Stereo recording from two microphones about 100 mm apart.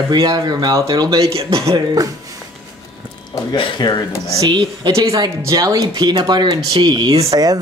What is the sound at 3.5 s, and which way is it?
Speech, 55° left (ahead or behind).